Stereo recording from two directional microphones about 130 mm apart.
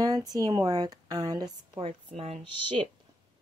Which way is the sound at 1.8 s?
50° right (ahead or behind).